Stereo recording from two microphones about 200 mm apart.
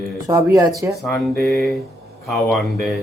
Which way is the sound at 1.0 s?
Centre (ahead or behind).